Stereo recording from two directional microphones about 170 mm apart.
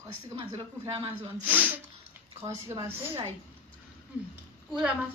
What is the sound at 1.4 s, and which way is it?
Snort, 10° right (ahead or behind).